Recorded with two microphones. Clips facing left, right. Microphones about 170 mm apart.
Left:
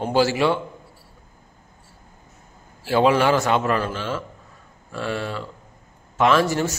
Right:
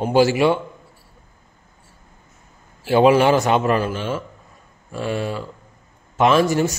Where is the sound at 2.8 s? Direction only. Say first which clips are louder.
Right 4 dB; 15° right (ahead or behind).